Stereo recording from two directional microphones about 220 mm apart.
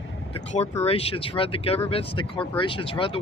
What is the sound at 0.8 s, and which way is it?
Speech, 25° left (ahead or behind).